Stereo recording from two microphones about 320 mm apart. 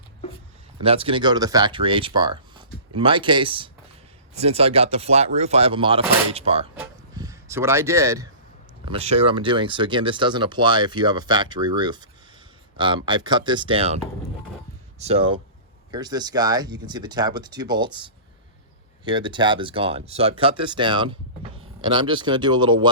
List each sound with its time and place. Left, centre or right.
0.8 s speech: centre
6.7 s a sound: centre
8.8 s speech: centre